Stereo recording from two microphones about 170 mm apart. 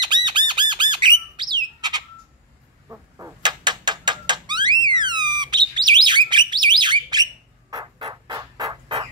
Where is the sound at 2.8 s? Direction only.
10° right (ahead or behind).